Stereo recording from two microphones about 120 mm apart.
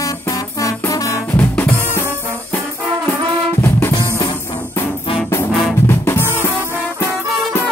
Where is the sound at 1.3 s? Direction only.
15° left (ahead or behind).